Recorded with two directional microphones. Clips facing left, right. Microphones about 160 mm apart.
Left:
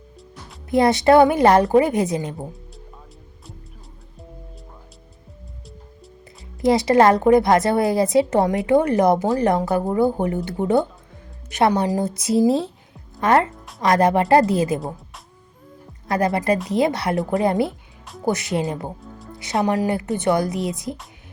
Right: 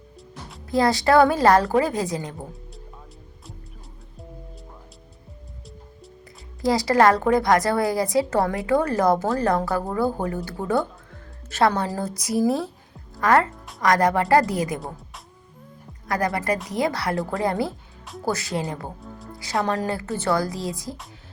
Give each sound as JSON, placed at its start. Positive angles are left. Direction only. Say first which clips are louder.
{"t": 0.7, "sound": "speech", "louder": "left 4 dB", "side_deg": 20}
{"t": 6.6, "sound": "speech", "louder": "left 3 dB", "side_deg": 25}
{"t": 16.0, "sound": "speech", "louder": "left 4 dB", "side_deg": 25}